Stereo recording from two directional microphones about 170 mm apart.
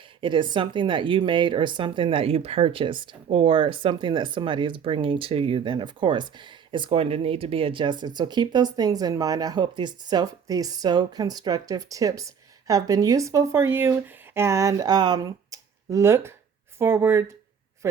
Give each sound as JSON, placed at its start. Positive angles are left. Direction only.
{"t": 0.2, "sound": "speech", "side_deg": -30}